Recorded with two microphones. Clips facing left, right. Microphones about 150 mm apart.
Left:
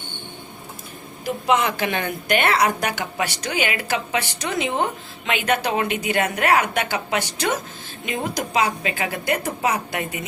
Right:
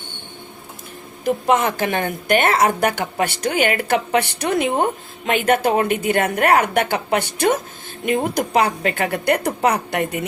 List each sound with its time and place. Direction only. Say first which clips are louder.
1.2 s a woman's voice: right 3 dB; 50° right (ahead or behind)